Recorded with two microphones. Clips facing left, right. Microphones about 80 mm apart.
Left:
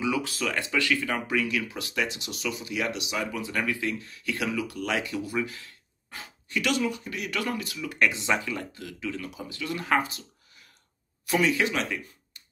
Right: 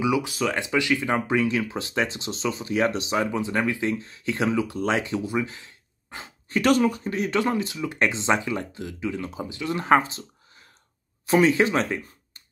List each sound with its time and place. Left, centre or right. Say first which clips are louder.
0.0 s speech: right 5 dB; centre
6.6 s speech: right 7 dB; right
11.2 s speech: right 6 dB; right